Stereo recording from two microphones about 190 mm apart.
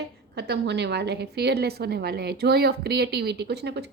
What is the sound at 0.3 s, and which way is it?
A woman's voice, 60° right (ahead or behind).